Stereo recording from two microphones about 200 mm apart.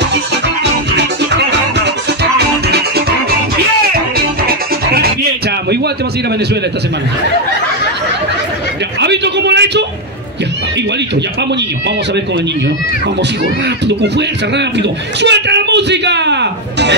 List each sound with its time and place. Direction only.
2.3 s music: 55° right (ahead or behind)
4.5 s music: 50° right (ahead or behind)
9.0 s a man's voice: 60° right (ahead or behind)
13.8 s a man's voice: 60° right (ahead or behind)